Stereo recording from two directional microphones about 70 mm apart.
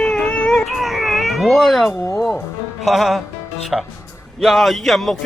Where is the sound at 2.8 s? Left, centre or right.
Centre.